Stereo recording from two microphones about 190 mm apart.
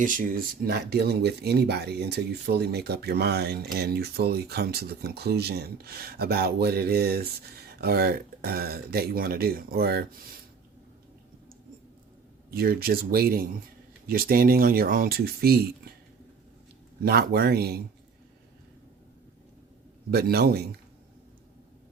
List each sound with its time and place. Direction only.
0.0 s speech: 45° right (ahead or behind)
12.5 s speech: 55° right (ahead or behind)
17.0 s speech: 55° right (ahead or behind)
20.1 s speech: 55° right (ahead or behind)